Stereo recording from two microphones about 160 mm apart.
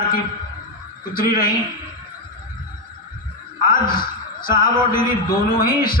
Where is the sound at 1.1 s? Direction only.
60° left (ahead or behind).